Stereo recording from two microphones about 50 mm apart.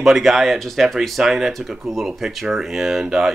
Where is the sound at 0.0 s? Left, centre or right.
Centre.